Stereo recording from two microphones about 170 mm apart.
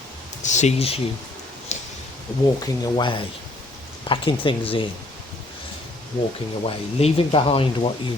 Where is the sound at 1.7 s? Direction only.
40° left (ahead or behind).